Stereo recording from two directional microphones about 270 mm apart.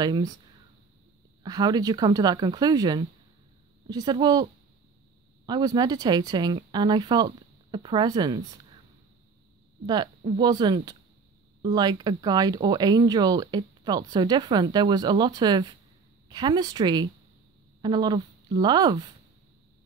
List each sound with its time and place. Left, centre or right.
0.0 s speech: centre
1.4 s speech: centre
5.5 s speech: centre
9.8 s speech: centre